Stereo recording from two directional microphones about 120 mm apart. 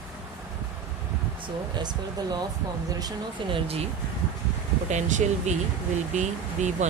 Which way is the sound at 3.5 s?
55° right (ahead or behind).